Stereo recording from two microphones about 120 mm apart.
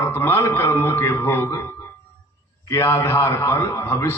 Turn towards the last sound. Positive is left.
turn(degrees=20)  # may be behind; listen again after turning